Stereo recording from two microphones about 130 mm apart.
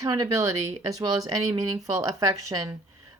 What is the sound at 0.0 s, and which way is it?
Speech, 25° right (ahead or behind).